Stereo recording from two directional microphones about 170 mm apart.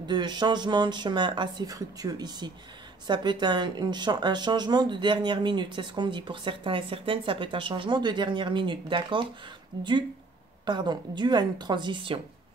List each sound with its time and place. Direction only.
0.0 s speech: 25° right (ahead or behind)